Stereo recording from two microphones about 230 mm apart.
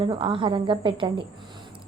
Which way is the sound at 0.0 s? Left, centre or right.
Right.